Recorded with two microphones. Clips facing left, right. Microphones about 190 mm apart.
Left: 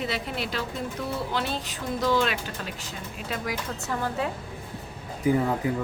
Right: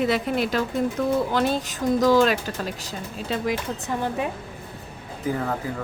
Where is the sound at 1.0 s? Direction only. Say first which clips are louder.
Right 9 dB; 60° right (ahead or behind).